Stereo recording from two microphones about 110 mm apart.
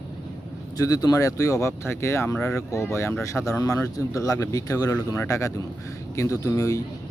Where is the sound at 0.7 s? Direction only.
35° left (ahead or behind).